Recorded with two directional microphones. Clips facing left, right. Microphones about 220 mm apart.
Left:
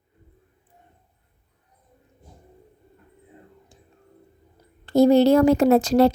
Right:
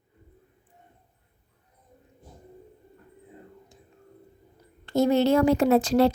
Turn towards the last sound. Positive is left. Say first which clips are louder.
# left 3 dB
turn(degrees=40)  # may be behind; listen again after turning